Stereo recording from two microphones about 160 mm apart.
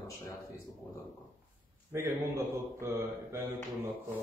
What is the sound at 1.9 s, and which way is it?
Speech, 15° right (ahead or behind).